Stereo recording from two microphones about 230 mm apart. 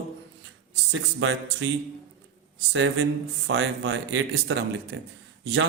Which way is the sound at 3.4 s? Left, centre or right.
Right.